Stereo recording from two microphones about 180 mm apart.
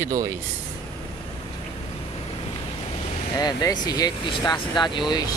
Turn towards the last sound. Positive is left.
turn(degrees=25)  # may be behind; listen again after turning